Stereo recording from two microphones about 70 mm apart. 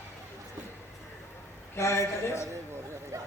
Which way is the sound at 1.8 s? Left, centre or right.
Left.